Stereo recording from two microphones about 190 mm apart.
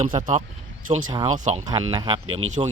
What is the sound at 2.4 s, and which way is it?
Speech, 90° right.